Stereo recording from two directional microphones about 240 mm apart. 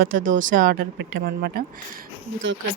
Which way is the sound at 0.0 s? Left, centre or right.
Right.